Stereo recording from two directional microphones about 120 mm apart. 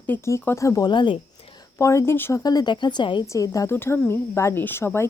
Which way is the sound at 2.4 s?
35° left (ahead or behind).